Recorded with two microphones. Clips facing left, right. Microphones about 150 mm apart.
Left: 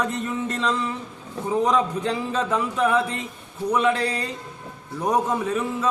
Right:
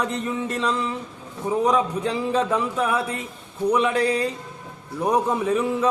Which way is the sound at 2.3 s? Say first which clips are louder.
Right 2 dB; 5° right (ahead or behind).